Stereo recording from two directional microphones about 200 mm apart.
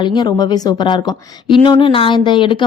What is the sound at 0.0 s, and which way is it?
Speech, 20° left (ahead or behind).